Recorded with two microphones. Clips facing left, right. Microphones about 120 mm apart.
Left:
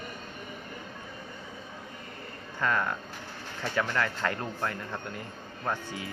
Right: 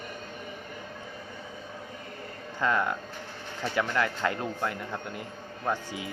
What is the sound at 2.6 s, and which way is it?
A man's voice, 20° right (ahead or behind).